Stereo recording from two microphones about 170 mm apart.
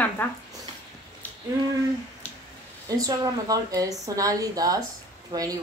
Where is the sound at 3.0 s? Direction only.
20° right (ahead or behind).